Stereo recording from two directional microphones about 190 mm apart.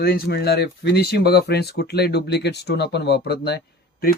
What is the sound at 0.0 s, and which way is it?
Speech, 55° left (ahead or behind).